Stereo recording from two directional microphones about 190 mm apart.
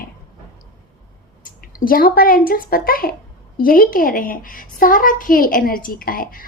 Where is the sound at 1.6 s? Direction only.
50° left (ahead or behind).